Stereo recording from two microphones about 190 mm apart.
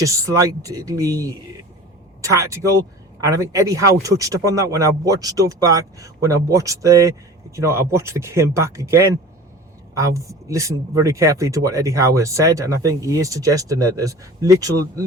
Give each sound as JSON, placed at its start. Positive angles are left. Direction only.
{"t": 0.0, "sound": "speech", "side_deg": -15}